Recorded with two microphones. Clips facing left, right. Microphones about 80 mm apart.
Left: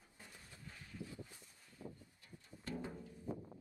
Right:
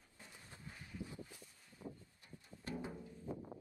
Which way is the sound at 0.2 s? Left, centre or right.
Right.